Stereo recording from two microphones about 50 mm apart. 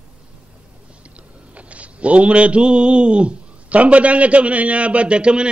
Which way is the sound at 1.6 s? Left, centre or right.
Right.